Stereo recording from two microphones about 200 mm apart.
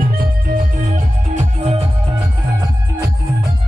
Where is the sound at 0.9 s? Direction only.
30° right (ahead or behind).